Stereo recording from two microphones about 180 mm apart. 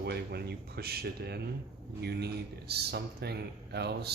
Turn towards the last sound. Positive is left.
turn(degrees=-65)  # may be behind; listen again after turning